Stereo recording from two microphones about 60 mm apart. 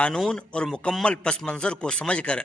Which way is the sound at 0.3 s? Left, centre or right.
Centre.